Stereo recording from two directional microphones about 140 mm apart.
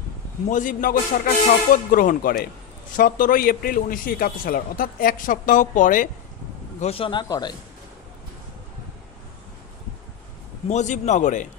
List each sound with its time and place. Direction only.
0.5 s a man's voice: 70° left (ahead or behind); by 2.3 s 90° left
3.0 s a man's voice: 75° left (ahead or behind)
6.8 s speech: 40° left (ahead or behind)
10.7 s speech: 55° left (ahead or behind)